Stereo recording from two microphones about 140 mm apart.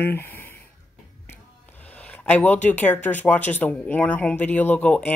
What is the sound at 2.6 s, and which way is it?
Speech, 10° left (ahead or behind).